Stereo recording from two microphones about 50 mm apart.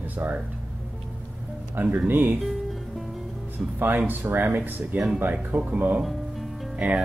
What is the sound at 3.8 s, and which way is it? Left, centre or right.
Speech, right.